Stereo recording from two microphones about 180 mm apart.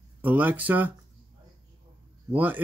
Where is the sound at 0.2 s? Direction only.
10° right (ahead or behind).